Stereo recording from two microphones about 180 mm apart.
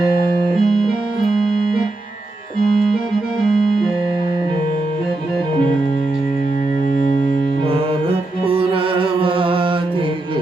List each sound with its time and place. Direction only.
0.5 s music: centre (ahead or behind)
7.7 s music: 30° right (ahead or behind)